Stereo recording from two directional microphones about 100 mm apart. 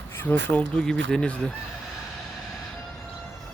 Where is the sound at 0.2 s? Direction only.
20° left (ahead or behind).